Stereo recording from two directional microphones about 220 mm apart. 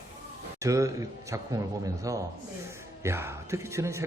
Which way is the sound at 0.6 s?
15° right (ahead or behind).